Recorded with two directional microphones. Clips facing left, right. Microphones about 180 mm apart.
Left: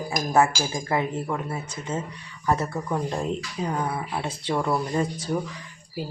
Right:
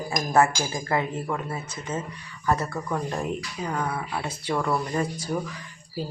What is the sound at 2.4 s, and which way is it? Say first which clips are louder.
Speech: left 1 dB; 20° left (ahead or behind).